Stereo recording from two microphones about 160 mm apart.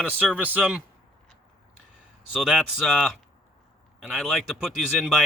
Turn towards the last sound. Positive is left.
turn(degrees=0)  # may be behind; listen again after turning